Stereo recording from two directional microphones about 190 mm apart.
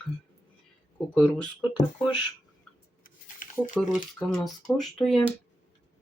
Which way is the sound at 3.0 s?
45° left (ahead or behind).